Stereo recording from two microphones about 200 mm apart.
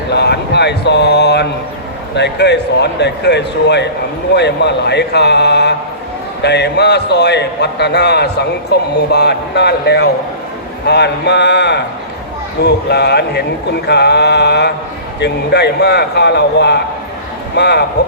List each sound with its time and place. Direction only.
0.1 s a man's voice: 55° left (ahead or behind)